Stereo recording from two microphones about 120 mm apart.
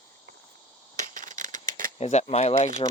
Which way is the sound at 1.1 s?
90° right.